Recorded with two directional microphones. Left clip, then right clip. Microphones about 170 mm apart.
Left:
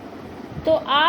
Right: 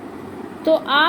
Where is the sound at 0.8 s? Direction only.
90° right.